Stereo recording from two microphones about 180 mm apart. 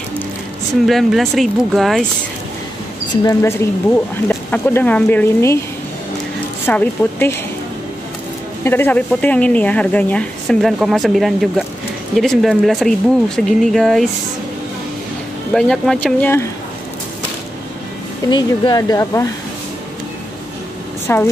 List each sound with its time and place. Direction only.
0.8 s speech: centre (ahead or behind)
3.3 s speech: 15° left (ahead or behind)
6.6 s speech: 10° left (ahead or behind)
8.6 s speech: 10° left (ahead or behind)
15.5 s speech: centre (ahead or behind)
18.3 s speech: 20° left (ahead or behind)
21.1 s speech: 10° left (ahead or behind)